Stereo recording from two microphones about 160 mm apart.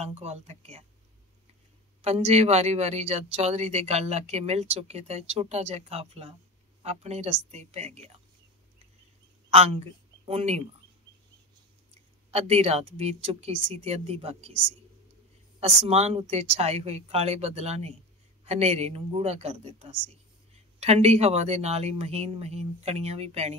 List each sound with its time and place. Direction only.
0.0 s speech: 40° right (ahead or behind)
2.0 s speech: 40° right (ahead or behind)
9.5 s speech: 40° right (ahead or behind)
12.3 s speech: 40° right (ahead or behind)
15.6 s speech: 40° right (ahead or behind)